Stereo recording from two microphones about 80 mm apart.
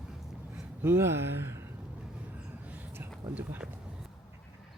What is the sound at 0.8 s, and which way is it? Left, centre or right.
Speech, right.